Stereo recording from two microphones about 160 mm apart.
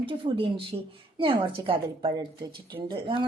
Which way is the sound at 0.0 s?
35° right (ahead or behind).